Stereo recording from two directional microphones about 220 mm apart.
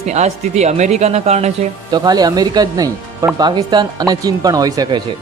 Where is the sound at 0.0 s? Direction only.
30° right (ahead or behind).